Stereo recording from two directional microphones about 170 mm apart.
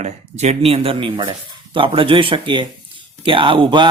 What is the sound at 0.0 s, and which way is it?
Speech, 40° right (ahead or behind).